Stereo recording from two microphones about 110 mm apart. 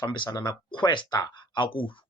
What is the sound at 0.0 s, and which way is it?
Speech, 45° left (ahead or behind).